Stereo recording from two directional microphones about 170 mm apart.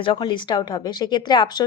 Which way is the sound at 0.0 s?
30° left (ahead or behind).